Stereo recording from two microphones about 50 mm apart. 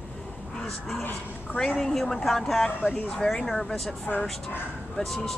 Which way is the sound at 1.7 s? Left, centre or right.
Centre.